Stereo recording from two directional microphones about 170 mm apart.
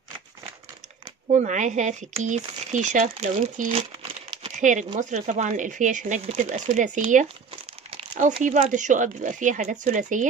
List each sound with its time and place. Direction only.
1.3 s speech: 45° right (ahead or behind)